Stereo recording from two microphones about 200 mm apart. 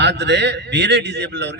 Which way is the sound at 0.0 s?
60° right (ahead or behind).